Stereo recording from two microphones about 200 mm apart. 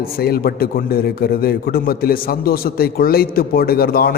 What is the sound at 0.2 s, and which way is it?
A man's voice, 50° left (ahead or behind).